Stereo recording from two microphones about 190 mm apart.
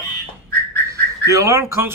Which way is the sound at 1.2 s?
15° right (ahead or behind).